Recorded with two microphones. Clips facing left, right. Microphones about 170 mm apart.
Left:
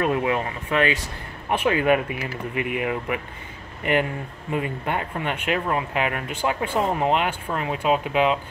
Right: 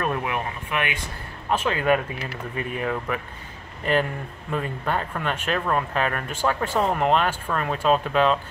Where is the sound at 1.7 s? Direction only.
15° left (ahead or behind).